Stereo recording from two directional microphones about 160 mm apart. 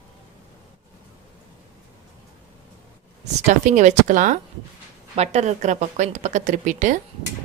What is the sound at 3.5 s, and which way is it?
Speech, 45° right (ahead or behind).